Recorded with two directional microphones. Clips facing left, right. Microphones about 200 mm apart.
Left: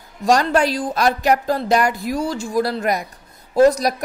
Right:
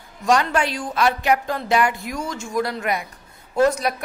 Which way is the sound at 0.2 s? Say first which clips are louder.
Left 3 dB; 35° left (ahead or behind).